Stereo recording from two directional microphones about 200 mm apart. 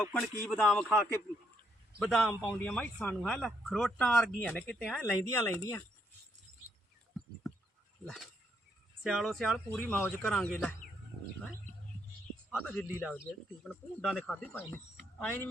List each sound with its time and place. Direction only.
0.0 s speech: 10° left (ahead or behind)
5.3 s speech: 15° left (ahead or behind)
8.0 s speech: centre (ahead or behind)
12.6 s speech: 10° left (ahead or behind)